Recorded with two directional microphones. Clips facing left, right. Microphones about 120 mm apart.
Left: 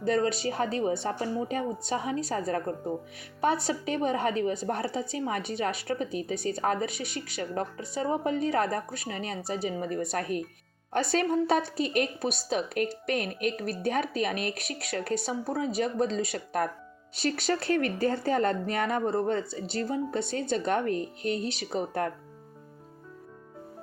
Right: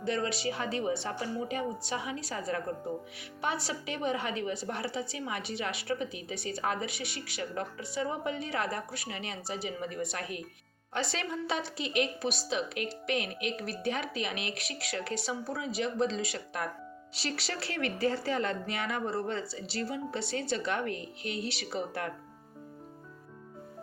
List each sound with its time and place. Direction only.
0.0 s a woman's voice: 40° left (ahead or behind)